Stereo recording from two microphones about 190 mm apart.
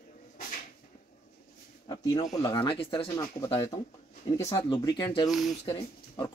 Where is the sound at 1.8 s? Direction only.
20° left (ahead or behind).